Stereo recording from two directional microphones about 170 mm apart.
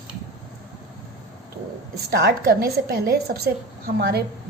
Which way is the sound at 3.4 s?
70° right (ahead or behind).